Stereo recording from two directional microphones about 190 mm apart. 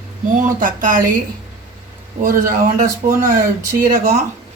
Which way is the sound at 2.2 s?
45° right (ahead or behind).